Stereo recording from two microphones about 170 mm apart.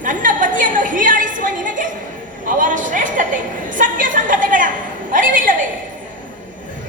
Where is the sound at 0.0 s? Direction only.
50° right (ahead or behind).